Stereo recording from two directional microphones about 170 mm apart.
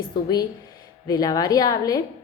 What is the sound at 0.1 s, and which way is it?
Speech, 25° left (ahead or behind).